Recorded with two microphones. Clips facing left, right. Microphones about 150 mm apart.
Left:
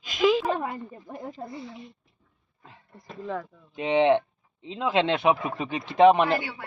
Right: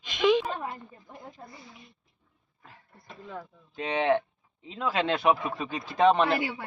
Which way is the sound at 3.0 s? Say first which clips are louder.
Left 8 dB; 85° left.